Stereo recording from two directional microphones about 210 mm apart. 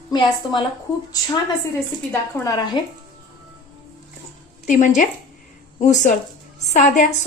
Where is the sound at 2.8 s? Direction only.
20° left (ahead or behind).